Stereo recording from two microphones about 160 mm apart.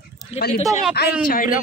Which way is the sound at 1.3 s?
60° left (ahead or behind).